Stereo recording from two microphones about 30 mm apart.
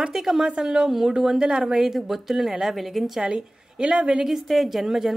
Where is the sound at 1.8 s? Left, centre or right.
Centre.